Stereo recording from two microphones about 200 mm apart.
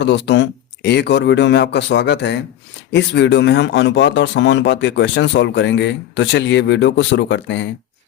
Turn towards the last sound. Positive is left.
turn(degrees=65)  # may be behind; listen again after turning